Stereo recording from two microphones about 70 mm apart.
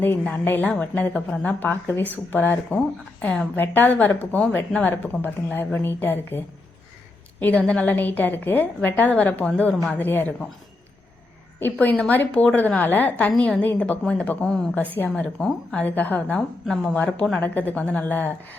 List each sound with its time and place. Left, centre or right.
0.4 s a woman's voice: left
3.5 s a woman's voice: left
11.6 s a woman's voice: left; by 14.7 s centre
14.8 s a woman's voice: left
15.1 s a woman's voice: centre
15.7 s a woman's voice: left
16.3 s a woman's voice: centre
16.9 s a woman's voice: left